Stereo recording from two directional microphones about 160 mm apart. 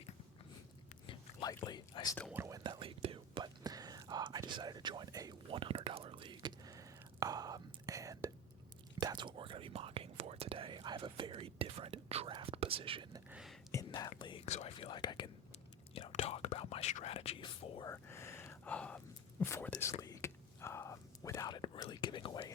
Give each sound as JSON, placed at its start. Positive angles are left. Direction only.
{"t": 1.0, "sound": "whispering", "side_deg": 30}
{"t": 2.3, "sound": "speech", "side_deg": -15}
{"t": 2.6, "sound": "whispering", "side_deg": -30}
{"t": 13.3, "sound": "a sound", "side_deg": 0}
{"t": 13.7, "sound": "whispering", "side_deg": 20}
{"t": 14.2, "sound": "whispering", "side_deg": 30}
{"t": 14.8, "sound": "whispering", "side_deg": 30}
{"t": 17.8, "sound": "a sound", "side_deg": 15}
{"t": 19.8, "sound": "whispering", "side_deg": 20}